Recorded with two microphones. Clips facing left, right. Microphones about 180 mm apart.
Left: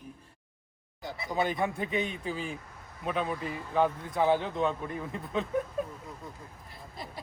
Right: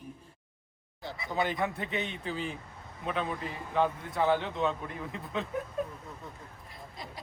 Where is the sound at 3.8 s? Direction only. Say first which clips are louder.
Left 2 dB; centre (ahead or behind).